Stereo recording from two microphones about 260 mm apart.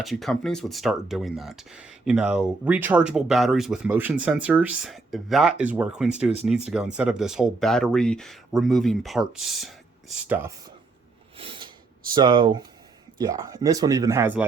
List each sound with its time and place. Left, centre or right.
0.0 s speech: centre
11.3 s a sound: centre
12.1 s speech: centre